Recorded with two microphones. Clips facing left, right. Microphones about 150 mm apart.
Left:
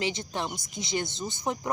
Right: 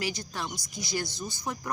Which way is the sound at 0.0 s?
20° left (ahead or behind).